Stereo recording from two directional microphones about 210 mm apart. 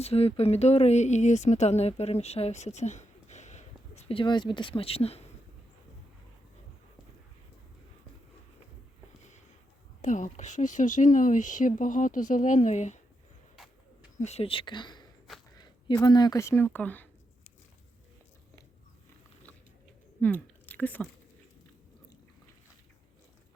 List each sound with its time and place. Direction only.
0.0 s speech: 30° left (ahead or behind)
10.0 s speech: 35° left (ahead or behind)
13.6 s bird: centre (ahead or behind)
14.2 s speech: 30° left (ahead or behind)
15.3 s a sound: centre (ahead or behind)
16.0 s speech: 20° left (ahead or behind)
20.2 s speech: 10° left (ahead or behind)